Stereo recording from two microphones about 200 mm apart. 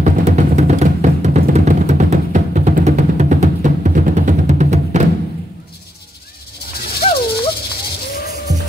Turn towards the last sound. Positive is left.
turn(degrees=30)  # may be behind; listen again after turning